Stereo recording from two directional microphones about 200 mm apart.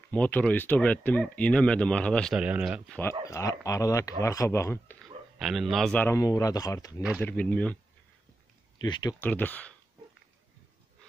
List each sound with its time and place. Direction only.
0.1 s speech: 5° left (ahead or behind)
2.9 s speech: 10° left (ahead or behind)
5.4 s speech: centre (ahead or behind)
8.7 s speech: 20° left (ahead or behind)
9.2 s speech: 10° left (ahead or behind)